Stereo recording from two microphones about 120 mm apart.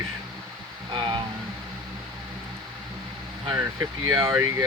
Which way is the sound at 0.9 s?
40° right (ahead or behind).